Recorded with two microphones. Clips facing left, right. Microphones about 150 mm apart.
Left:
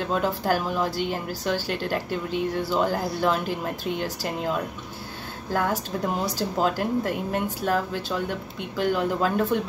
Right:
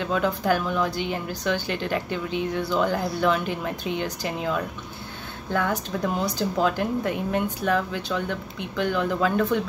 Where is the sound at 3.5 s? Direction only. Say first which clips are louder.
Even; centre (ahead or behind).